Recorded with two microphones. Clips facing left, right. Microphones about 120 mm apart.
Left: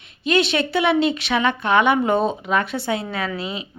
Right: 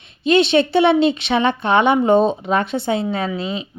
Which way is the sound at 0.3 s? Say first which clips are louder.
Right 5 dB; 25° right (ahead or behind).